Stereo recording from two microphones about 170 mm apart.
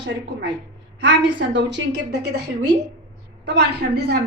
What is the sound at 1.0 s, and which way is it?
A woman's voice, 90° right.